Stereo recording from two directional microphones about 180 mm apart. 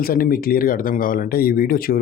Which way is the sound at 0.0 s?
55° left (ahead or behind).